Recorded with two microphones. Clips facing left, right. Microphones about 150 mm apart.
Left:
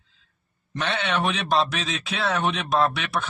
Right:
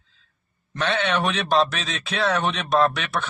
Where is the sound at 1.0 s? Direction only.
10° left (ahead or behind).